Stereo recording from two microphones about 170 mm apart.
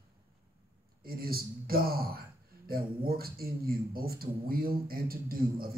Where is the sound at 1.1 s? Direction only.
60° right (ahead or behind).